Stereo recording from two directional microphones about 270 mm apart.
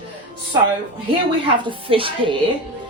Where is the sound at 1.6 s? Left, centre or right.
Centre.